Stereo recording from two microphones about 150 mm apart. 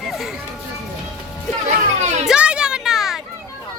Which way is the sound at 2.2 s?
5° right (ahead or behind).